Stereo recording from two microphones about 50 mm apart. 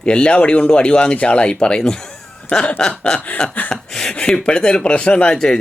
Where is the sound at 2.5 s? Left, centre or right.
Centre.